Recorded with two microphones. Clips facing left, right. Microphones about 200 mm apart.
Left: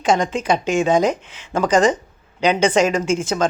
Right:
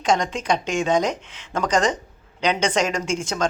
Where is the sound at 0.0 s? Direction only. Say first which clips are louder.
Left 3 dB; 5° left (ahead or behind).